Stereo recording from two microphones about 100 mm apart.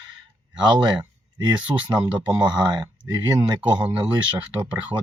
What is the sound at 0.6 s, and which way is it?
Speech, 45° right (ahead or behind).